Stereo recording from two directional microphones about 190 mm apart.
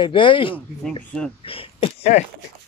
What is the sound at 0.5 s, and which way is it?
Speech, 5° left (ahead or behind).